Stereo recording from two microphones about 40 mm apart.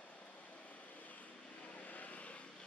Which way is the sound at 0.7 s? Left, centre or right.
Left.